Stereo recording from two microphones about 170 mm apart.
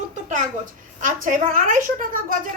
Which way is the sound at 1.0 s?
50° right (ahead or behind).